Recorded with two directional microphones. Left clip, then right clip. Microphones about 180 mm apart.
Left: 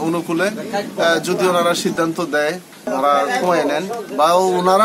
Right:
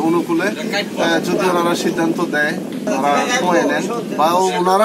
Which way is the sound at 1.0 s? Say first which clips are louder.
Left 1 dB; 30° left (ahead or behind).